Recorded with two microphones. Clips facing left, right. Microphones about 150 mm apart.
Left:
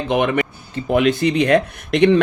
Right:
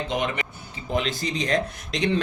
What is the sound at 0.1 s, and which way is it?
Speech, 60° left (ahead or behind).